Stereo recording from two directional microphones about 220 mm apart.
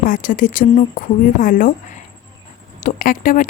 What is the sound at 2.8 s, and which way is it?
Speech, 40° left (ahead or behind).